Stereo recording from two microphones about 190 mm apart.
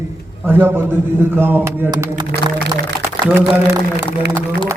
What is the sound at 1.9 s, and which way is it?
Speech, 20° right (ahead or behind).